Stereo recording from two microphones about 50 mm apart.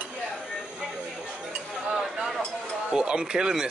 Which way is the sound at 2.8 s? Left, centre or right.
Centre.